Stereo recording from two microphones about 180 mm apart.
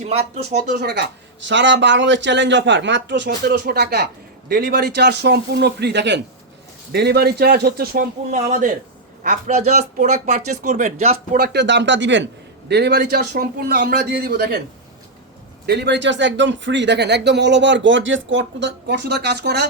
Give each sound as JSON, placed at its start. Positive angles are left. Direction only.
{"t": 0.7, "sound": "speech", "side_deg": -70}
{"t": 1.5, "sound": "a man's voice", "side_deg": -90}
{"t": 8.3, "sound": "speech", "side_deg": -45}
{"t": 11.3, "sound": "a man's voice", "side_deg": -65}
{"t": 15.6, "sound": "speech", "side_deg": -70}